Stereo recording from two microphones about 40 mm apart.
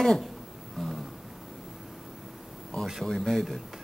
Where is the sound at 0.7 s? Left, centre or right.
Centre.